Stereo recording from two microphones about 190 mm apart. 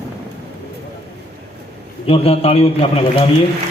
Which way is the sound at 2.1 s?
30° left (ahead or behind).